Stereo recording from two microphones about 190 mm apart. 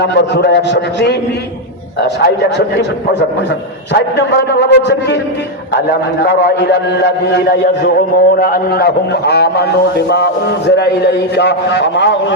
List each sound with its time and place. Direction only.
0.0 s a man's voice: 60° left (ahead or behind)
3.9 s a man's voice: 60° left (ahead or behind)
10.8 s a man's voice: 60° left (ahead or behind)